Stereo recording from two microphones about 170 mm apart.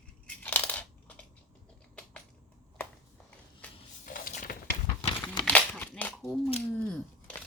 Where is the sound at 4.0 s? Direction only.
55° left (ahead or behind).